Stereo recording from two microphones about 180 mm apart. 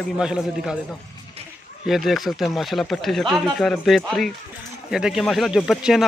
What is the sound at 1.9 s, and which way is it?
Speech, centre (ahead or behind).